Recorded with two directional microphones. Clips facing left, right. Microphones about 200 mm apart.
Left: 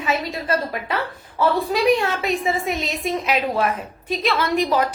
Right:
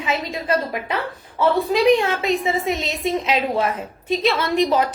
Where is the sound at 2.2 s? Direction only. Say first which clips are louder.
Right 2 dB; 25° right (ahead or behind).